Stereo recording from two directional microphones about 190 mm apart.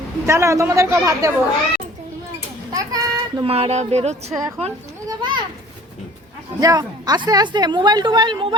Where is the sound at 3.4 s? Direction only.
30° right (ahead or behind).